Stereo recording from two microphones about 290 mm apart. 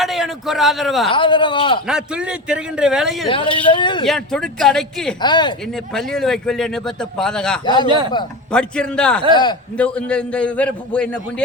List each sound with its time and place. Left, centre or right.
0.0 s a man's voice: centre
1.1 s speech: centre
1.9 s speech: centre
3.2 s speech: centre
4.0 s speech: centre
5.2 s speech: centre
5.7 s speech: centre
7.6 s speech: centre
7.9 s a man's voice: centre
8.5 s speech: centre
9.3 s speech: centre
9.7 s speech: centre